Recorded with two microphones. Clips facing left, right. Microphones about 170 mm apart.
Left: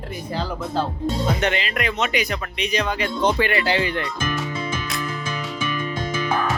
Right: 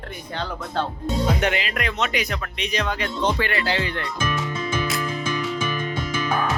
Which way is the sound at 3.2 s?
15° left (ahead or behind).